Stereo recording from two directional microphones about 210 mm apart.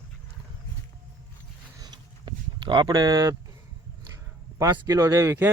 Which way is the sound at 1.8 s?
20° right (ahead or behind).